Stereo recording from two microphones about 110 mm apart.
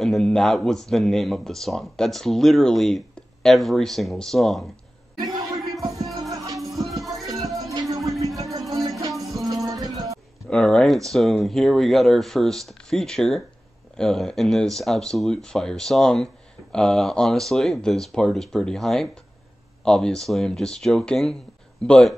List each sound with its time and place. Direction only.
0.0 s speech: 5° left (ahead or behind)
5.2 s music: 30° right (ahead or behind)
6.6 s music: centre (ahead or behind)
7.2 s music: 30° right (ahead or behind)
10.5 s speech: 5° left (ahead or behind)